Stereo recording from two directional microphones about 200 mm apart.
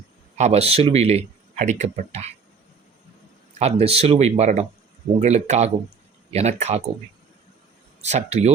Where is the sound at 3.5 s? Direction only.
30° right (ahead or behind).